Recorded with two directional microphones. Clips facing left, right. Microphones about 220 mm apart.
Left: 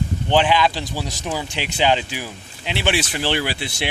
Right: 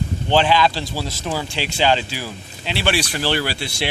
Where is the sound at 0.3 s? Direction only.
15° left (ahead or behind).